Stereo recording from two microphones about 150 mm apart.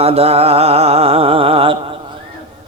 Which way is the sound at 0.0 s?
40° right (ahead or behind).